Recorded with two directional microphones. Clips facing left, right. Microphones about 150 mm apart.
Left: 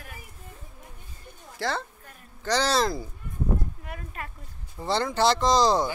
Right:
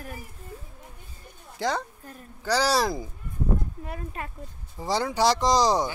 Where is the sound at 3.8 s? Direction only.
25° right (ahead or behind).